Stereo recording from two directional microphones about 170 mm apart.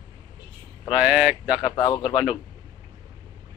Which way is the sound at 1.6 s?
25° left (ahead or behind).